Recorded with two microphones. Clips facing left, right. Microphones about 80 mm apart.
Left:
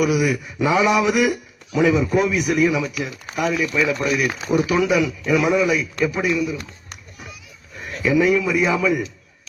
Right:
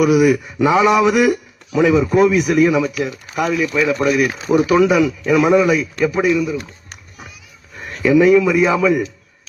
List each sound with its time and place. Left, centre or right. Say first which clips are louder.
0.0 s speech: right 6 dB; right
7.8 s speech: right 5 dB; right